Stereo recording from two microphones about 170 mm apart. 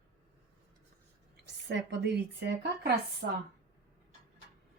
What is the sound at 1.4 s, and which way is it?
A woman's voice, 90° right.